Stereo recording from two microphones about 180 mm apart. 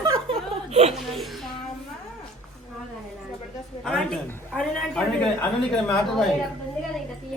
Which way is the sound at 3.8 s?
5° left (ahead or behind).